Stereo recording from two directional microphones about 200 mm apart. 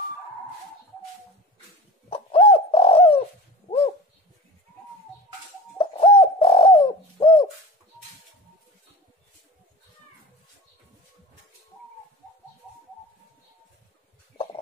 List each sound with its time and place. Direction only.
2.0 s bird: 30° left (ahead or behind)
5.8 s bird: 25° left (ahead or behind)